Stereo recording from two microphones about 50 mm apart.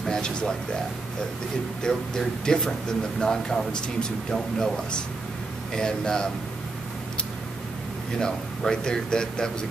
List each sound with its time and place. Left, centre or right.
0.1 s speech: centre
1.8 s speech: centre
8.2 s speech: centre